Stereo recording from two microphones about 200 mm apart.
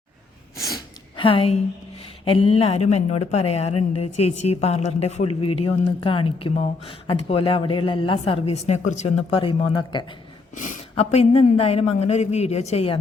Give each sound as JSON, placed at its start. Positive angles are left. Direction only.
{"t": 0.6, "sound": "a sound", "side_deg": 20}
{"t": 2.2, "sound": "a woman's voice", "side_deg": 25}
{"t": 10.5, "sound": "speech", "side_deg": 40}